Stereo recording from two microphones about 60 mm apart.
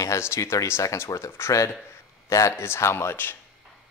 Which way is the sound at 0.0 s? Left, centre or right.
Left.